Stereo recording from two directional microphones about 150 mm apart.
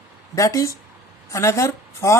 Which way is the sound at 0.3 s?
20° left (ahead or behind).